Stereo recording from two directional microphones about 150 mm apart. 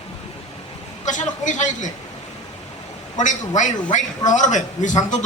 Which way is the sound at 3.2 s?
55° left (ahead or behind).